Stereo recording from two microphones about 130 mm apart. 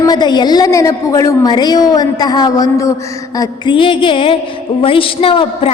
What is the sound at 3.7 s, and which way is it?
A woman's voice, 40° left (ahead or behind).